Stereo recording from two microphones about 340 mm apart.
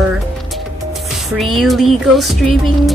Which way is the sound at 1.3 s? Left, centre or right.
Centre.